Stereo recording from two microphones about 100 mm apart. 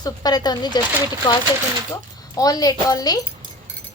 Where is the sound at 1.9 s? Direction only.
35° left (ahead or behind).